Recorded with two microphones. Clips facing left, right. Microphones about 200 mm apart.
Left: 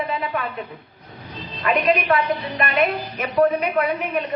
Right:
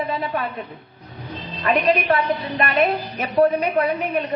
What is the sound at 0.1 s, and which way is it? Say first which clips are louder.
Speech: right 1 dB; 30° right (ahead or behind).